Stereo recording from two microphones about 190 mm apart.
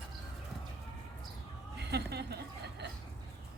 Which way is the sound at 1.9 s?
60° right (ahead or behind).